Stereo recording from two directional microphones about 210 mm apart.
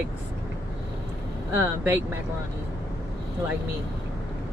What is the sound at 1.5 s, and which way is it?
Speech, 10° right (ahead or behind).